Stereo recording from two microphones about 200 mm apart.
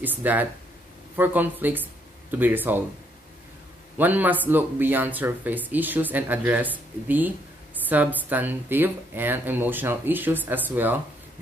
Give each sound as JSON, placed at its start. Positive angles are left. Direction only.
{"t": 0.0, "sound": "speech", "side_deg": -10}
{"t": 4.0, "sound": "speech", "side_deg": -10}